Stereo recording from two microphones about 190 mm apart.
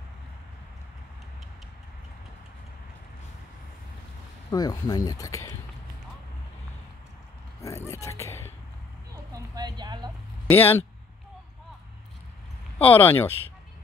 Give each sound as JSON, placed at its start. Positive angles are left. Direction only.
{"t": 4.5, "sound": "speech", "side_deg": 20}
{"t": 7.6, "sound": "speech", "side_deg": 15}
{"t": 9.1, "sound": "a sound", "side_deg": -20}
{"t": 10.5, "sound": "speech", "side_deg": 10}
{"t": 12.7, "sound": "speech", "side_deg": 10}